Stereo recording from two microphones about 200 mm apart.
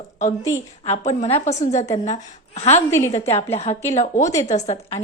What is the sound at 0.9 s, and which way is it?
A woman's voice, 35° left (ahead or behind).